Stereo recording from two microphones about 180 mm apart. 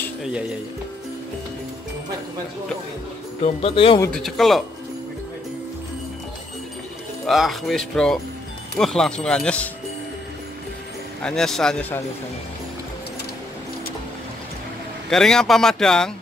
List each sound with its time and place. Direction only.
0.2 s speech: 5° right (ahead or behind)
3.4 s speech: 30° left (ahead or behind)
4.1 s speech: centre (ahead or behind)
7.2 s speech: centre (ahead or behind)
11.2 s speech: 5° left (ahead or behind)
15.0 s speech: 5° left (ahead or behind)